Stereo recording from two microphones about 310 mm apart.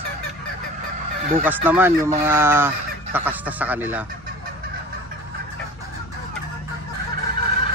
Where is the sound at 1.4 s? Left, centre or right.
Centre.